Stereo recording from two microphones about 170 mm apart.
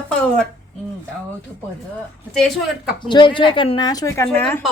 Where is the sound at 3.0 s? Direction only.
30° left (ahead or behind); by 4.6 s 10° left (ahead or behind).